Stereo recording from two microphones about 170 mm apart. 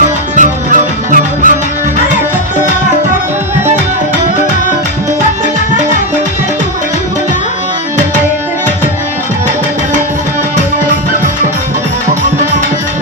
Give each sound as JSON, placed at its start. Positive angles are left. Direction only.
{"t": 0.3, "sound": "music", "side_deg": -50}